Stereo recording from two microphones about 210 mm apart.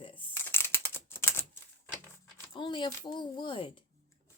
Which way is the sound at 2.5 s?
25° left (ahead or behind).